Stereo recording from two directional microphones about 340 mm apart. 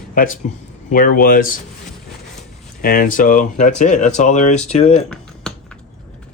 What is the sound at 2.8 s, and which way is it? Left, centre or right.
Speech, left.